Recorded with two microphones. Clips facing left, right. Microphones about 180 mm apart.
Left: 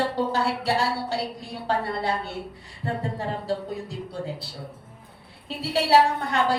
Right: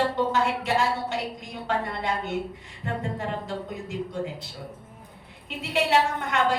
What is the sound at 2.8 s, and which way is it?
A woman's voice, 35° left (ahead or behind).